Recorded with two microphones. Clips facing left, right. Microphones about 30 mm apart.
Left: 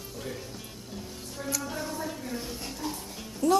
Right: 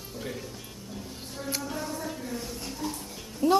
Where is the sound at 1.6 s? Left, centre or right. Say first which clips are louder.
Even; centre.